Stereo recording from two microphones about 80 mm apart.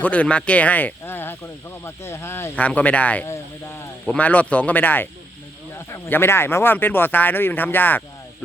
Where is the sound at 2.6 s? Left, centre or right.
Centre.